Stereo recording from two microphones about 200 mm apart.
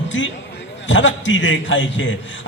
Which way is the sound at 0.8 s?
65° left (ahead or behind).